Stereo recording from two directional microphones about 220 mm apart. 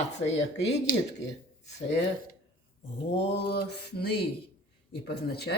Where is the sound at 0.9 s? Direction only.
40° left (ahead or behind).